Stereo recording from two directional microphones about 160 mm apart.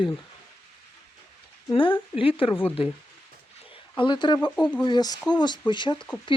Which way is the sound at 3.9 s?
30° left (ahead or behind).